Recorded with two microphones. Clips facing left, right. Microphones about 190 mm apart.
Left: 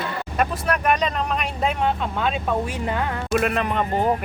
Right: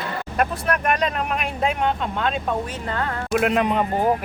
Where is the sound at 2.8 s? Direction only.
15° left (ahead or behind).